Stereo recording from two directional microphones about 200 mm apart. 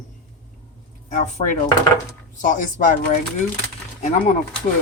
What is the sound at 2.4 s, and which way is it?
Speech, 40° left (ahead or behind).